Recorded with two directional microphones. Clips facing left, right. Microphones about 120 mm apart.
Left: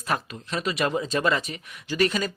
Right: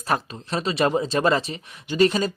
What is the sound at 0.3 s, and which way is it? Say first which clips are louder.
Speech: right 3 dB; 30° right (ahead or behind).